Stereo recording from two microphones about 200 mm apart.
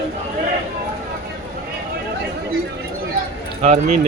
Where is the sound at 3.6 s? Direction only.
35° right (ahead or behind).